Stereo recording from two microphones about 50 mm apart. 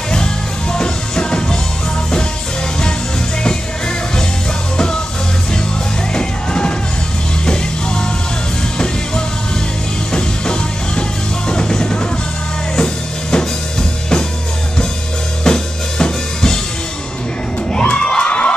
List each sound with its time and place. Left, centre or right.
0.1 s music: centre
6.1 s music: centre
15.4 s drum kit: centre
17.8 s crowd: centre